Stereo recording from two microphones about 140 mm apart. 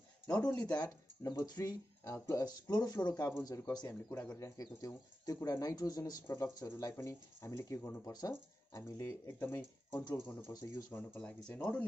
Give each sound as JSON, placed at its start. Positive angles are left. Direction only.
{"t": 0.3, "sound": "speech", "side_deg": 10}
{"t": 0.7, "sound": "speech", "side_deg": 25}